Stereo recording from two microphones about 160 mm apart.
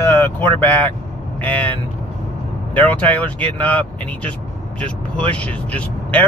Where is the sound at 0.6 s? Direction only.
10° left (ahead or behind).